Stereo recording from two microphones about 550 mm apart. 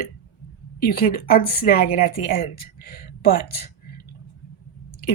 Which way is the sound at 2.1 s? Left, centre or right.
Left.